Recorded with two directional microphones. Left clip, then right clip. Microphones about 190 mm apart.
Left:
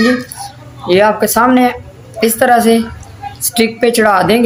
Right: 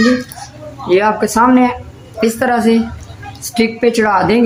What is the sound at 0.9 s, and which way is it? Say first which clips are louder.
A woman's voice: left 2 dB; 15° left (ahead or behind).